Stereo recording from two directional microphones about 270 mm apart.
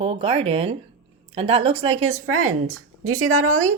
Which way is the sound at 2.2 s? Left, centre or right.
Right.